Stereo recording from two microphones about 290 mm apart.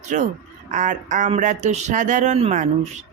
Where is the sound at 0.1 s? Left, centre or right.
Right.